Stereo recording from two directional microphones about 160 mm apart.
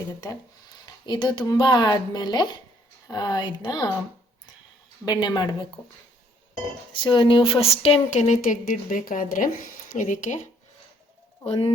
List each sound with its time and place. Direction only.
1.0 s speech: 30° left (ahead or behind)
5.2 s speech: 25° left (ahead or behind)
6.9 s speech: 30° left (ahead or behind); by 10.4 s 50° left (ahead or behind)
11.4 s speech: 40° left (ahead or behind)